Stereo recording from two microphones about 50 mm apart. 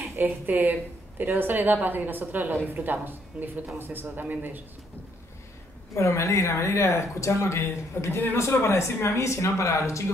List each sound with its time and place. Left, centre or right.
0.2 s a woman's voice: right
5.9 s speech: left